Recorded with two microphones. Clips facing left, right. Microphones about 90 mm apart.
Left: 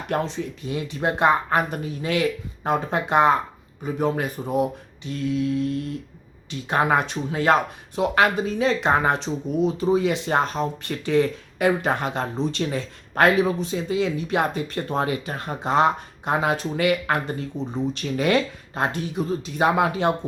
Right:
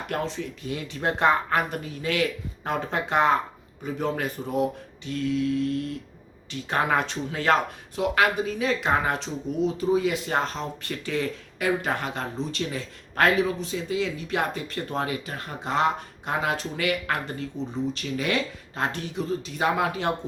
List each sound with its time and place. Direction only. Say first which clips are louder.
0.1 s speech: left 5 dB; 20° left (ahead or behind)
9.1 s speech: left 4 dB; 20° left (ahead or behind)
15.0 s speech: left 4 dB; 35° left (ahead or behind)
15.4 s speech: left 5 dB; 20° left (ahead or behind)
17.7 s speech: left 4 dB; 55° left (ahead or behind)
18.8 s speech: left 4 dB; 15° left (ahead or behind)